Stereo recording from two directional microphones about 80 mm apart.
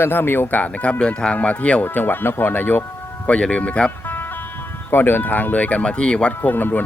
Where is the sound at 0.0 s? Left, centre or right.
Left.